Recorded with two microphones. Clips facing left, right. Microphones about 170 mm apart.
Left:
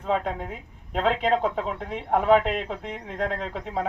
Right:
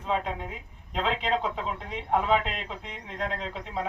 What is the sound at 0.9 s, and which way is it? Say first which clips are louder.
Speech: left 5 dB; 50° left (ahead or behind).